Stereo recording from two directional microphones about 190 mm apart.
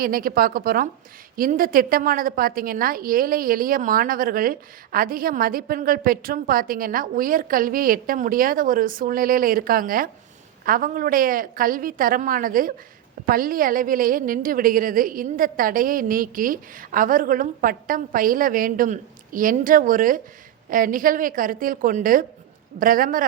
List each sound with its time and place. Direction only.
0.0 s a woman's voice: 50° right (ahead or behind)